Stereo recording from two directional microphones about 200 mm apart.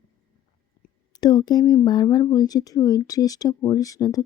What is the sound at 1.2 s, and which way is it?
Speech, 20° left (ahead or behind).